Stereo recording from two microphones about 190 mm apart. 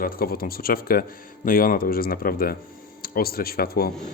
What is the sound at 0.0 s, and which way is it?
Speech, 50° left (ahead or behind).